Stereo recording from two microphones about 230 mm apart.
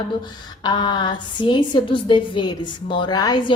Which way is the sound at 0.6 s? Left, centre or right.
Centre.